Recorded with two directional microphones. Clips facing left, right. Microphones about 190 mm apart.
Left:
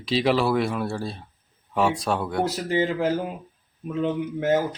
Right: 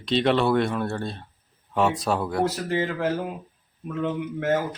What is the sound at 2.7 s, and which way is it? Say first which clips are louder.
Speech: left 2 dB; 15° left (ahead or behind).